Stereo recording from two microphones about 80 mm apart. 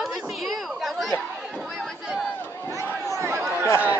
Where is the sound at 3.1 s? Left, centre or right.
Right.